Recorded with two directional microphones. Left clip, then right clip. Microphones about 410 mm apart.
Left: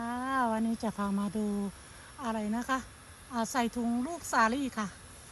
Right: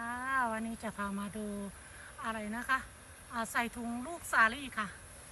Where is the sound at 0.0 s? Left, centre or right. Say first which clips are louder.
Left 2 dB; centre.